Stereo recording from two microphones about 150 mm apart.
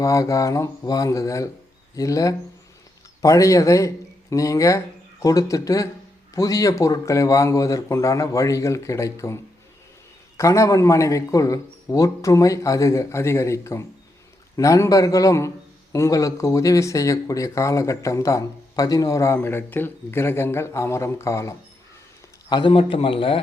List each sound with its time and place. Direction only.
0.0 s a man's voice: 20° left (ahead or behind)
22.4 s a man's voice: 30° left (ahead or behind)